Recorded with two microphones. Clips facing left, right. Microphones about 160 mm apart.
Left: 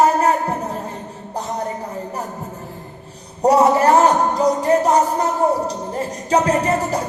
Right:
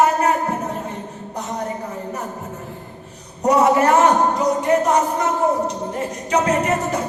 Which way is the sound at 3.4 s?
35° left (ahead or behind).